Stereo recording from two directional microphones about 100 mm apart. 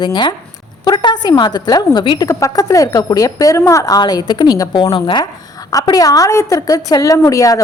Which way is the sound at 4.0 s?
45° left (ahead or behind).